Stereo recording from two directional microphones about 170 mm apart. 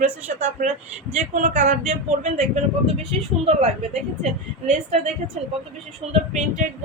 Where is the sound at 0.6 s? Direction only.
55° right (ahead or behind).